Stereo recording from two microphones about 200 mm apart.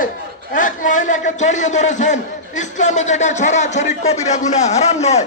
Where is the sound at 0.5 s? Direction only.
40° left (ahead or behind).